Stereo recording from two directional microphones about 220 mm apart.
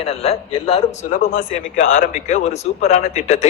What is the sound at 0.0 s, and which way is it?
A man's voice, 30° left (ahead or behind).